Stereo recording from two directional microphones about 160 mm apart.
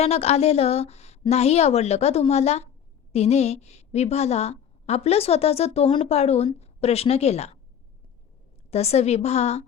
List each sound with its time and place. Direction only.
0.0 s a woman's voice: 40° left (ahead or behind)
8.7 s a woman's voice: 40° left (ahead or behind)